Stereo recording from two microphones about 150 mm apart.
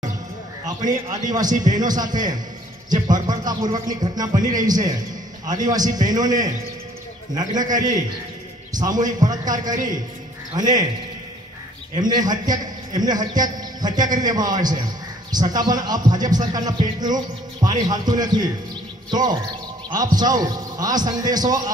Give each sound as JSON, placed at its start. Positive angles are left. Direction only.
{"t": 1.3, "sound": "speech", "side_deg": -25}
{"t": 11.9, "sound": "speech", "side_deg": -30}